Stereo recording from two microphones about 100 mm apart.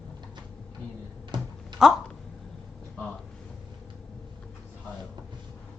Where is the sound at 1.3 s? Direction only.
50° right (ahead or behind).